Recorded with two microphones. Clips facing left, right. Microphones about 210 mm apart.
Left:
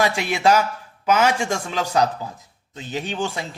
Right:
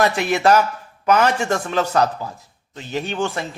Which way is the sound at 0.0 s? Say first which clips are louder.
Right 2 dB; 10° left (ahead or behind).